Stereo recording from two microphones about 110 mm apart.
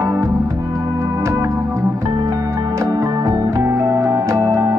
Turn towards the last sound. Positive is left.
turn(degrees=-30)  # may be behind; listen again after turning